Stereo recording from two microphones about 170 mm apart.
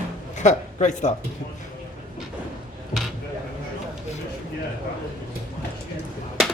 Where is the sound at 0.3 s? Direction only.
45° left (ahead or behind).